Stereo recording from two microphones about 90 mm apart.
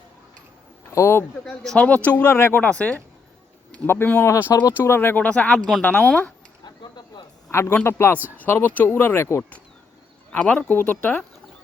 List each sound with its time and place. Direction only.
0.9 s speech: 30° left (ahead or behind)
1.5 s speech: 5° left (ahead or behind)
2.0 s speech: 20° left (ahead or behind)
2.7 s speech: 10° left (ahead or behind)
3.8 s speech: 25° left (ahead or behind)
6.7 s a sound: 55° left (ahead or behind)
7.9 s speech: 30° left (ahead or behind)
10.3 s speech: 15° left (ahead or behind)